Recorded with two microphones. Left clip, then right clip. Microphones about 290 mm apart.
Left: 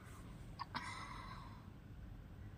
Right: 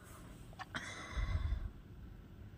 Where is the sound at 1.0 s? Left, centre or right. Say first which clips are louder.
Right 2 dB; centre.